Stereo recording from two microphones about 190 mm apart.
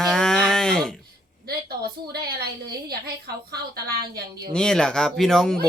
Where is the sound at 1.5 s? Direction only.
55° right (ahead or behind).